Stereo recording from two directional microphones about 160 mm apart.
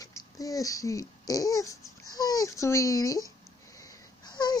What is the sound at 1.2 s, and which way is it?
Speech, 20° left (ahead or behind).